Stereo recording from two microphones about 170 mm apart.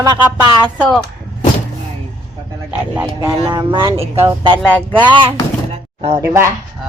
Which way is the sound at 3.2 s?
25° right (ahead or behind).